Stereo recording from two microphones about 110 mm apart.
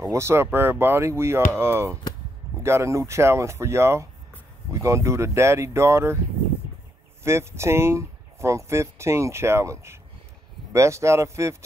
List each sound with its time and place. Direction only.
0.0 s speech: 25° right (ahead or behind)
7.2 s speech: 25° right (ahead or behind)